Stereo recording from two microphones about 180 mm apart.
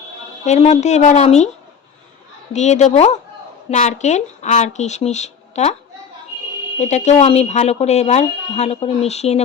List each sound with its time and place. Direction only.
0.4 s speech: 40° left (ahead or behind)
2.5 s speech: 40° left (ahead or behind)
6.7 s speech: 40° left (ahead or behind)